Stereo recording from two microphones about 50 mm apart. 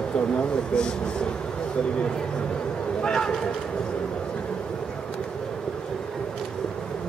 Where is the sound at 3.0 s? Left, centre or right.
Centre.